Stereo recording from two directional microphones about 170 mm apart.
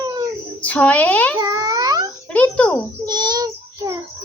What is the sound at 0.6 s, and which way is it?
Speech, 10° left (ahead or behind).